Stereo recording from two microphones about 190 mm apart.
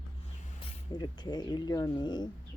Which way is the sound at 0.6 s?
25° left (ahead or behind).